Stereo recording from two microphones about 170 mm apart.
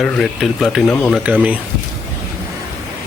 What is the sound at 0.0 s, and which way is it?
Speech, centre (ahead or behind).